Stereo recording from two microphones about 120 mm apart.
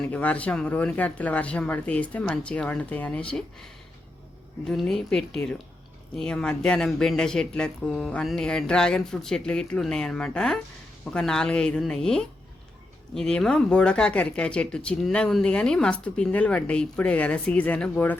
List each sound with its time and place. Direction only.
0.0 s speech: 10° left (ahead or behind)